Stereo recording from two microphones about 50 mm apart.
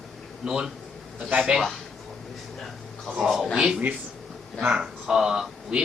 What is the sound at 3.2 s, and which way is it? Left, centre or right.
Speech, centre.